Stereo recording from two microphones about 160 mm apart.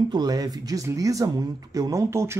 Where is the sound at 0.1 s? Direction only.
25° right (ahead or behind).